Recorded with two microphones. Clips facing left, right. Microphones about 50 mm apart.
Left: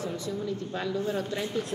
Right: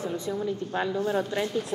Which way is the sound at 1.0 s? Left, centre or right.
Right.